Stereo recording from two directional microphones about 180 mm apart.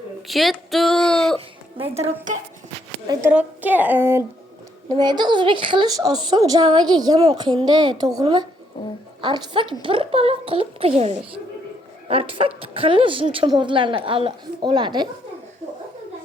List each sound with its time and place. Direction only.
0.3 s speech: centre (ahead or behind)
1.8 s speech: 30° right (ahead or behind)
2.3 s speech: 45° right (ahead or behind)
3.2 s speech: 10° right (ahead or behind)
4.9 s a woman's voice: 25° right (ahead or behind)